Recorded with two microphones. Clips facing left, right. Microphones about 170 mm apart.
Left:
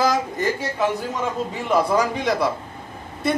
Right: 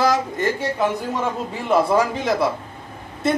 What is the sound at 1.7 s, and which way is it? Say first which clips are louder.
Speech: right 2 dB; 5° right (ahead or behind).